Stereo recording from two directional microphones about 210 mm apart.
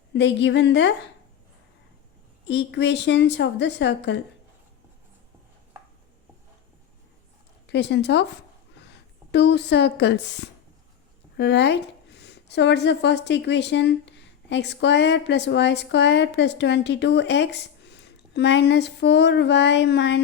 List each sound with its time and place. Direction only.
0.1 s a woman's voice: 55° left (ahead or behind)
2.5 s a woman's voice: 55° left (ahead or behind)
7.7 s a woman's voice: 55° left (ahead or behind)